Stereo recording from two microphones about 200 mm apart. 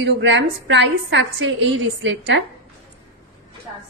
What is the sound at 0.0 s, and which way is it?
A woman's voice, 65° right (ahead or behind).